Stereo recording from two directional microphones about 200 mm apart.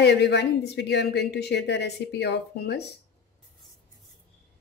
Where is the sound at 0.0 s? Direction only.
60° left (ahead or behind).